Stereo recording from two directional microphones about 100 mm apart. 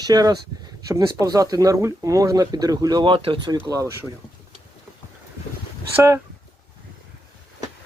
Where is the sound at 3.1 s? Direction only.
60° right (ahead or behind).